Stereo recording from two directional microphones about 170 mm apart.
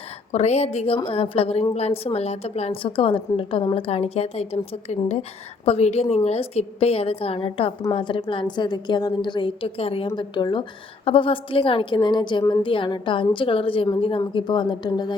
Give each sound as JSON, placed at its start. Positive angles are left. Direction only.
{"t": 0.3, "sound": "a woman's voice", "side_deg": 40}